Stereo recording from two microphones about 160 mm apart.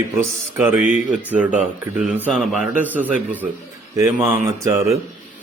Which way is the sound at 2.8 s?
10° right (ahead or behind).